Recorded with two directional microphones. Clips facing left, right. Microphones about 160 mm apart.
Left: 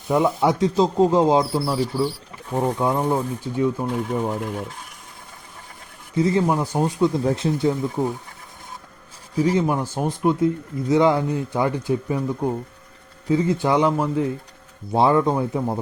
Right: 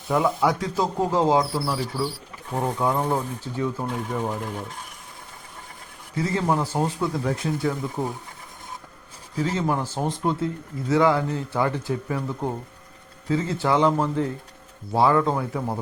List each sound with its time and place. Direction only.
0.1 s speech: 20° left (ahead or behind)
2.8 s speech: 15° left (ahead or behind)
6.1 s speech: 20° left (ahead or behind)
9.4 s speech: 15° left (ahead or behind)
14.9 s speech: 20° left (ahead or behind)